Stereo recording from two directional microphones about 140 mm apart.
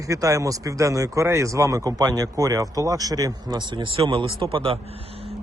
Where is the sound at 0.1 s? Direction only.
25° right (ahead or behind).